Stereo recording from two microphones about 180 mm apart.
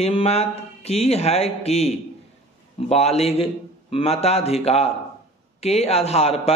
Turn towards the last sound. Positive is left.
turn(degrees=35)  # may be behind; listen again after turning